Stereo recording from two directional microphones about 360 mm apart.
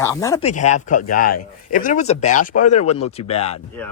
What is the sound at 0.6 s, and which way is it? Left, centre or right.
Speech, centre.